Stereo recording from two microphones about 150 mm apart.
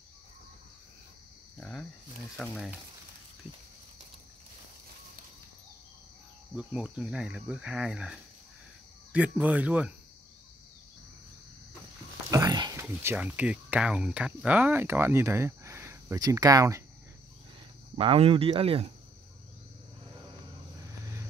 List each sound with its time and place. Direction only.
1.6 s speech: 5° left (ahead or behind)
2.4 s cricket: 5° right (ahead or behind)
6.5 s cricket: 5° right (ahead or behind)
12.3 s speech: 25° right (ahead or behind)
17.9 s speech: 35° right (ahead or behind)